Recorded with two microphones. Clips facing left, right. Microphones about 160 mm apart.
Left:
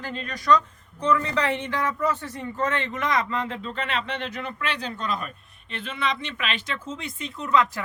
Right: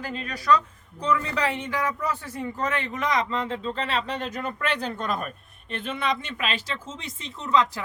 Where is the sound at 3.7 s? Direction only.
35° right (ahead or behind).